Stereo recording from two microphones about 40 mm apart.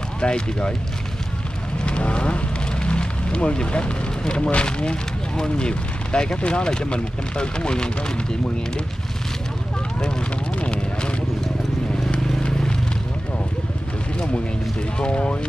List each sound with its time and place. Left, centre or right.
0.2 s speech: left
1.9 s speech: left
10.6 s clip-clop: left
15.0 s speech: left